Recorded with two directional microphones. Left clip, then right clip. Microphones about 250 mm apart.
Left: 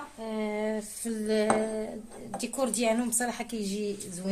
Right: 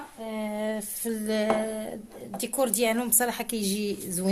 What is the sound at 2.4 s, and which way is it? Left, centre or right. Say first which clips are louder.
Speech: right 4 dB; right.